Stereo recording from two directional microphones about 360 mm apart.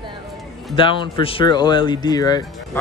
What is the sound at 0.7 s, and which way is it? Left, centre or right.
Speech, centre.